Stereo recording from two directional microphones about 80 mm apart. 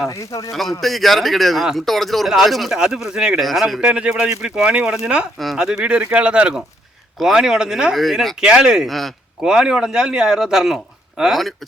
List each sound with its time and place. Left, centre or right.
0.1 s speech: left
0.5 s speech: centre
3.8 s speech: centre
5.4 s speech: centre
5.8 s speech: centre